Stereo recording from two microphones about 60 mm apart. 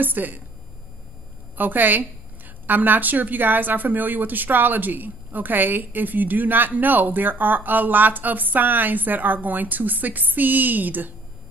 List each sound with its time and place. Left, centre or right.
0.0 s a woman's voice: right
1.6 s a woman's voice: right